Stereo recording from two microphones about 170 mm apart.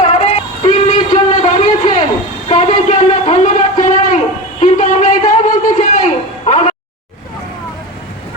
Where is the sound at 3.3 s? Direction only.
45° left (ahead or behind).